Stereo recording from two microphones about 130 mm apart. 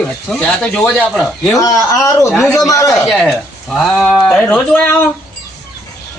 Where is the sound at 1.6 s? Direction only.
25° left (ahead or behind).